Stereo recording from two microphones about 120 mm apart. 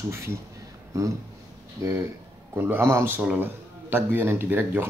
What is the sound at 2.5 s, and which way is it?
Speech, 15° right (ahead or behind).